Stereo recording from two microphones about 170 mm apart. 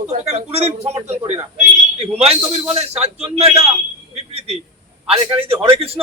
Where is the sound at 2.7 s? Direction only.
40° right (ahead or behind).